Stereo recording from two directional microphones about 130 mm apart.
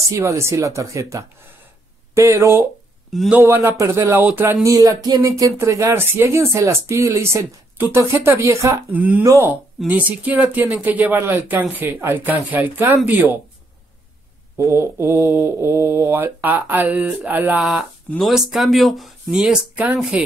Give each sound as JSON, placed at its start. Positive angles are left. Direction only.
{"t": 0.1, "sound": "speech", "side_deg": -20}
{"t": 3.1, "sound": "a man's voice", "side_deg": 0}
{"t": 3.3, "sound": "speech", "side_deg": -20}
{"t": 4.6, "sound": "speech", "side_deg": -25}
{"t": 8.9, "sound": "speech", "side_deg": -10}
{"t": 9.2, "sound": "speech", "side_deg": -25}
{"t": 9.5, "sound": "speech", "side_deg": -10}
{"t": 14.6, "sound": "speech", "side_deg": -20}
{"t": 17.6, "sound": "speech", "side_deg": 0}